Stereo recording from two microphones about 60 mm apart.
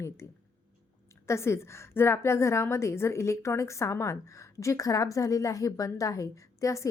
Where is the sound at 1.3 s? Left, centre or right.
Left.